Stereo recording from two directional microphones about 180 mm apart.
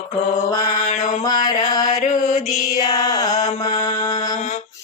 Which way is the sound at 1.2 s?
20° left (ahead or behind).